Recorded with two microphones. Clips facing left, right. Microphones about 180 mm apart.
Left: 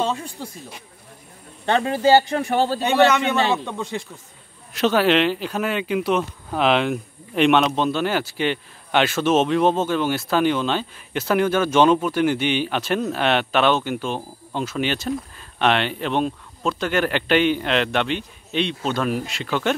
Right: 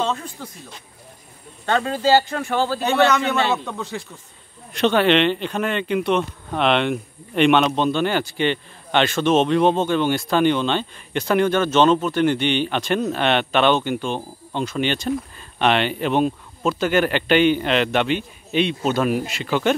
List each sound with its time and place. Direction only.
0.0 s speech: 10° left (ahead or behind)
1.7 s a man's voice: 20° left (ahead or behind)
4.7 s speech: 5° left (ahead or behind)